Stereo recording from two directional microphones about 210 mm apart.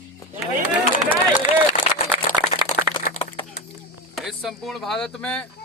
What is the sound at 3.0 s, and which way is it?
Crack, 35° left (ahead or behind).